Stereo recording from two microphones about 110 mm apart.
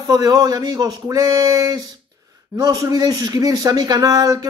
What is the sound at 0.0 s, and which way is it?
Speech, 35° right (ahead or behind).